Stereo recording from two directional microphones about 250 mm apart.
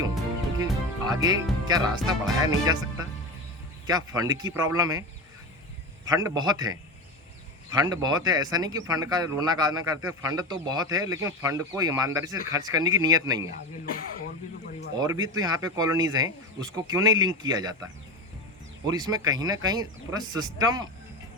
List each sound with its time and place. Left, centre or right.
0.6 s music: centre
2.4 s a man's voice: centre
6.1 s a man's voice: centre
15.0 s a man's voice: centre
18.9 s a man's voice: centre